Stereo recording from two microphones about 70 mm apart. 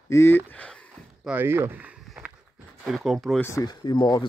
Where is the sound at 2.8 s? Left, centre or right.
Centre.